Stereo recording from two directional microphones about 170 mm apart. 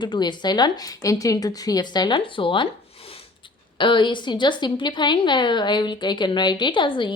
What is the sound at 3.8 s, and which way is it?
A woman's voice, 30° left (ahead or behind).